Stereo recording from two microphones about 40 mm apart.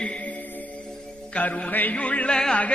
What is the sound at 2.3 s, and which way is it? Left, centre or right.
Speech, left.